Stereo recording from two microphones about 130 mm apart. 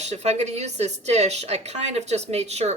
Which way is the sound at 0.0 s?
60° right (ahead or behind).